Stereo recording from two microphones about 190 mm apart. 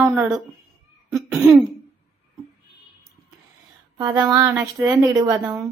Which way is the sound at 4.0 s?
20° right (ahead or behind).